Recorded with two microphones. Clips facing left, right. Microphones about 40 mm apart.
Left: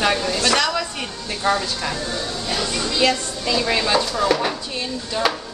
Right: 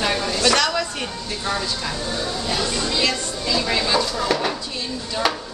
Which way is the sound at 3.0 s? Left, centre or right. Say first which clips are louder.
Left 6 dB; left.